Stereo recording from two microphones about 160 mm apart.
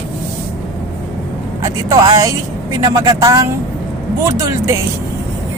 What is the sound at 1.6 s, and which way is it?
Speech, 20° right (ahead or behind).